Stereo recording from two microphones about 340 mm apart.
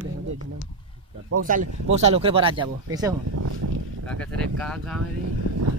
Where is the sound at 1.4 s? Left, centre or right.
Right.